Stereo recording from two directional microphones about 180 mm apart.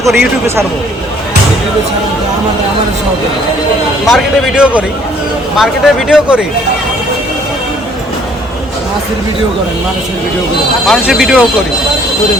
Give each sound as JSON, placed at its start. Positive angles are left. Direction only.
{"t": 0.2, "sound": "speech", "side_deg": -15}
{"t": 4.0, "sound": "speech", "side_deg": 0}
{"t": 10.8, "sound": "speech", "side_deg": 0}